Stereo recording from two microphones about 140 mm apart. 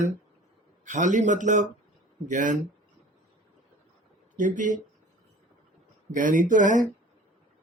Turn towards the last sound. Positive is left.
turn(degrees=-65)  # may be behind; listen again after turning